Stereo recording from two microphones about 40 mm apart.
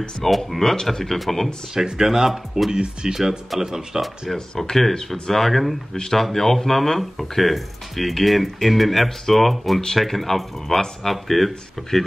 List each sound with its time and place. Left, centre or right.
0.2 s speech: centre
1.8 s speech: centre
3.2 s speech: centre
4.0 s speech: centre
4.9 s speech: centre
5.3 s speech: centre
5.9 s speech: centre